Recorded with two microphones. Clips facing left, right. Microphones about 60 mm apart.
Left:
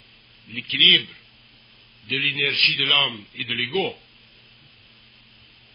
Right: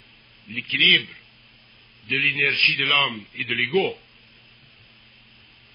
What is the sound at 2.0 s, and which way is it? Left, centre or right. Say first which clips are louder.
A man's voice: right 2 dB; right.